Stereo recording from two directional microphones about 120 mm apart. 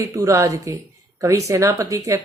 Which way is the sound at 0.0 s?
25° right (ahead or behind).